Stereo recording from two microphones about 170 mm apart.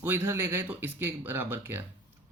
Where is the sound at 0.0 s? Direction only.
15° right (ahead or behind).